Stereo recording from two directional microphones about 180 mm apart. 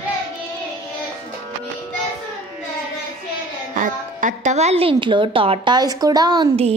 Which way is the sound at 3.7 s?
45° right (ahead or behind).